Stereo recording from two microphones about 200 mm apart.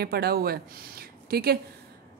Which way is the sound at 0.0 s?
50° right (ahead or behind).